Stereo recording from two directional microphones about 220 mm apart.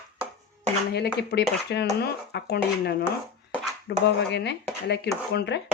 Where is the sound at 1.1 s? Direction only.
50° left (ahead or behind).